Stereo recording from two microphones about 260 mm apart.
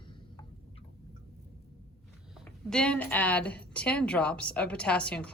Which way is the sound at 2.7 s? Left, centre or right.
Centre.